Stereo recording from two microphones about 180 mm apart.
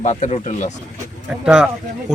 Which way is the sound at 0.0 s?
40° left (ahead or behind).